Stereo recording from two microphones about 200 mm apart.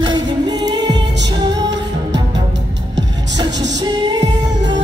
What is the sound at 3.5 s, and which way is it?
Music, 60° right (ahead or behind).